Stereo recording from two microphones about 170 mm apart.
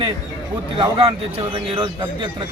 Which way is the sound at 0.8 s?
30° right (ahead or behind).